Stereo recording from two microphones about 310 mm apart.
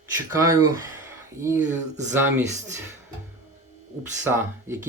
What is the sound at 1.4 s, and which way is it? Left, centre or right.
Speech, centre.